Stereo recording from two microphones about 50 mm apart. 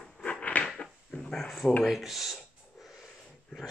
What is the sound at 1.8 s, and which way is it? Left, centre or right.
Speech, centre.